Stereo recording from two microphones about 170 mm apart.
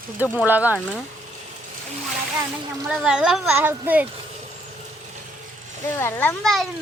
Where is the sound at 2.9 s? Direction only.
5° right (ahead or behind).